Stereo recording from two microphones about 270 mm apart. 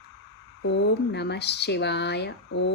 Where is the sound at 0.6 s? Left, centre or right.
Left.